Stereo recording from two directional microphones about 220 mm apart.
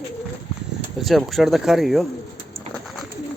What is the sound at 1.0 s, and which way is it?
Speech, centre (ahead or behind).